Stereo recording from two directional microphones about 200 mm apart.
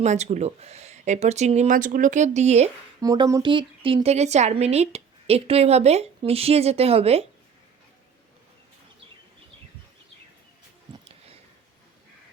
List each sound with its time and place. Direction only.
0.0 s a woman's voice: 35° right (ahead or behind)
3.0 s a woman's voice: 15° right (ahead or behind)